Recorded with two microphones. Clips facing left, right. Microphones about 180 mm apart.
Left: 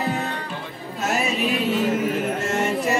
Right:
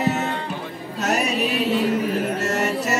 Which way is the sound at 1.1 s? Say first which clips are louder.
Right 1 dB; 40° right (ahead or behind).